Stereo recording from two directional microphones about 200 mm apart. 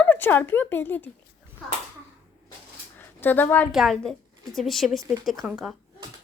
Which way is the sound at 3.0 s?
10° left (ahead or behind).